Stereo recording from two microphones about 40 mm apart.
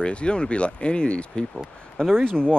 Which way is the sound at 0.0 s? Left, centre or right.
Left.